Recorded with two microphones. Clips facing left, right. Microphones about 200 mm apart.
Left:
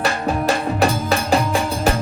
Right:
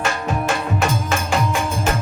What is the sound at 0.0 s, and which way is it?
Music, 35° left (ahead or behind).